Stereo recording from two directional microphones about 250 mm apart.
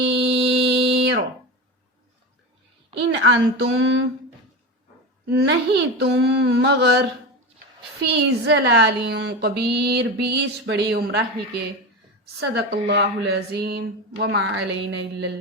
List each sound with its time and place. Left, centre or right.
0.0 s a sound: right
3.0 s a woman's voice: right
5.2 s a child's voice: right
8.0 s speech: right
12.2 s speech: right